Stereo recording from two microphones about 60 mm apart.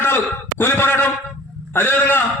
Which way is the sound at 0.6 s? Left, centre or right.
Left.